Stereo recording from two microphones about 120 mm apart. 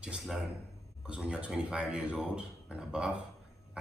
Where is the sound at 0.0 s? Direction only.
5° right (ahead or behind).